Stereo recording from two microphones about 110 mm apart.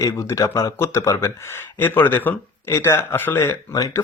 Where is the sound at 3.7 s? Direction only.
30° left (ahead or behind).